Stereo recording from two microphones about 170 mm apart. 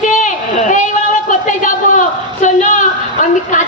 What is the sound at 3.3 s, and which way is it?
Speech, 45° left (ahead or behind).